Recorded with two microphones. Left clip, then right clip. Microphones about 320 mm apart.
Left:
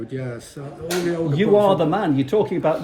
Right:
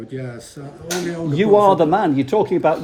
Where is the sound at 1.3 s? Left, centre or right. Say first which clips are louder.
Right 4 dB; right.